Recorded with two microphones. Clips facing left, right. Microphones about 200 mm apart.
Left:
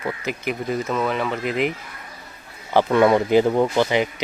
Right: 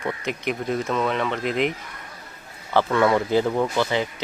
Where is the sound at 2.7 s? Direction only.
15° left (ahead or behind).